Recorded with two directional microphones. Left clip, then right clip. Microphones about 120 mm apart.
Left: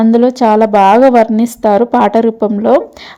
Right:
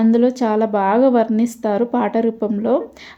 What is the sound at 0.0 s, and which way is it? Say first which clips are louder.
A woman's voice: left 7 dB; 35° left (ahead or behind).